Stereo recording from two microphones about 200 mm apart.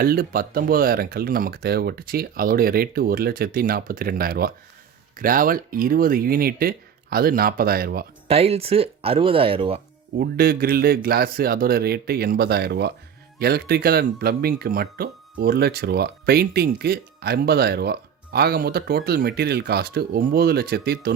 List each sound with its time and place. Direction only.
0.0 s speech: 45° right (ahead or behind)
8.3 s speech: 30° right (ahead or behind)
10.2 s speech: 50° right (ahead or behind)